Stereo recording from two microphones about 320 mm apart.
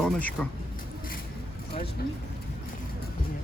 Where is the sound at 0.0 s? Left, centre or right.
Centre.